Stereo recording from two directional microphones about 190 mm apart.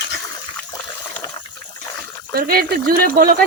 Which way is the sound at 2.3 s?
50° right (ahead or behind).